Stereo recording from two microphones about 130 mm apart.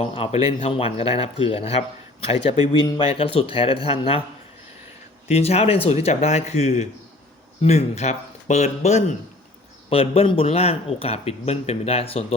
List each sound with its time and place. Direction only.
0.0 s speech: 50° left (ahead or behind)
5.3 s speech: 50° left (ahead or behind)
9.9 s speech: 45° left (ahead or behind)